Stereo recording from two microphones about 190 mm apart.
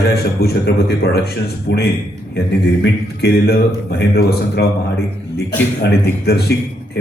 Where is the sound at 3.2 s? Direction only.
55° left (ahead or behind).